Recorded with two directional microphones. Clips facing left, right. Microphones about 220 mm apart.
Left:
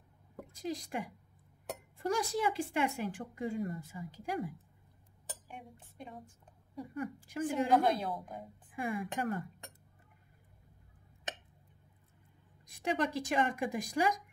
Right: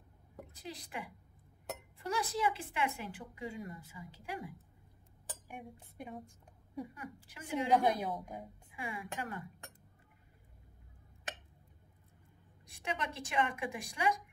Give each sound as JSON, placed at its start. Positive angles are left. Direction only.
{"t": 0.6, "sound": "a woman's voice", "side_deg": 45}
{"t": 5.5, "sound": "speech", "side_deg": -10}
{"t": 7.0, "sound": "a woman's voice", "side_deg": 50}
{"t": 7.8, "sound": "speech", "side_deg": -15}
{"t": 8.7, "sound": "a woman's voice", "side_deg": 50}
{"t": 12.6, "sound": "a woman's voice", "side_deg": 40}